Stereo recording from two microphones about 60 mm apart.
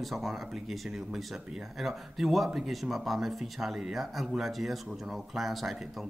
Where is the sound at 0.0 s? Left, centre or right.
Centre.